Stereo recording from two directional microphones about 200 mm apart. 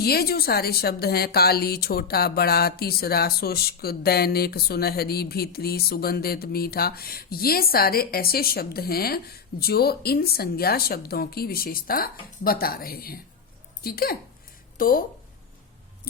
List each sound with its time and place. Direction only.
0.0 s a woman's voice: 50° left (ahead or behind)